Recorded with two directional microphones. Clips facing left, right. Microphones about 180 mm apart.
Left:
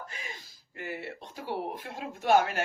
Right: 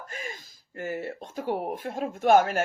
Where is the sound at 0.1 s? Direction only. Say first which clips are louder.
Right 6 dB; 45° right (ahead or behind).